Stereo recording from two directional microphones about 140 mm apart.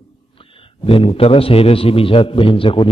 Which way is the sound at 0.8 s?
40° left (ahead or behind).